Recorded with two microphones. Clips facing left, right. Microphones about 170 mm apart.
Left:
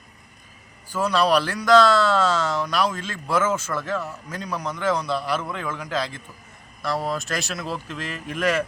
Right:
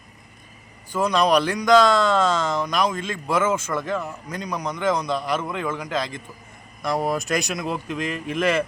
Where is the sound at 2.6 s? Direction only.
10° right (ahead or behind).